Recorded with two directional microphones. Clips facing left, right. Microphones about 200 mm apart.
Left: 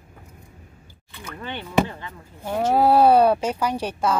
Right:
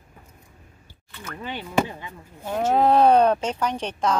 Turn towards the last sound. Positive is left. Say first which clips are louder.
# left 1 dB
turn(degrees=5)  # may be behind; listen again after turning